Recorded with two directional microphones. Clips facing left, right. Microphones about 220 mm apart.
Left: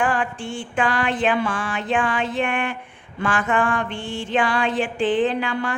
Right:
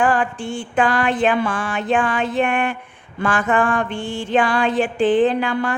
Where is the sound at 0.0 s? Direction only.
40° right (ahead or behind).